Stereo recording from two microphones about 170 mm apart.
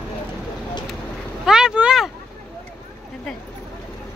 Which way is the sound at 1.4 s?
5° right (ahead or behind).